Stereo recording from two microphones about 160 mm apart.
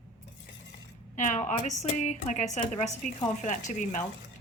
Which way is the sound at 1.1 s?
55° left (ahead or behind).